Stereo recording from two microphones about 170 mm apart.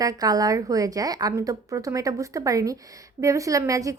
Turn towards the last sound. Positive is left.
turn(degrees=-20)  # may be behind; listen again after turning